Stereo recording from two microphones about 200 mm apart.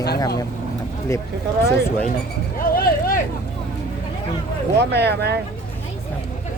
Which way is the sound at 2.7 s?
45° left (ahead or behind).